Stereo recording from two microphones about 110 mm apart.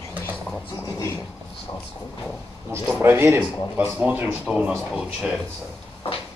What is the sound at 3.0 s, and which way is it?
Speech, 20° right (ahead or behind).